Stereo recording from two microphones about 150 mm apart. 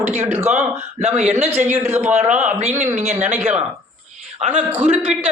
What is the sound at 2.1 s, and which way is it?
Speech, 50° right (ahead or behind).